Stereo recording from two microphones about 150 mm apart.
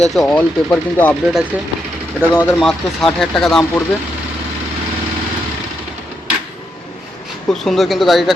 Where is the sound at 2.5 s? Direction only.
Centre (ahead or behind).